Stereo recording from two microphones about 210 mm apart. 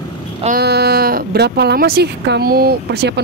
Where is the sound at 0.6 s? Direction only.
50° right (ahead or behind).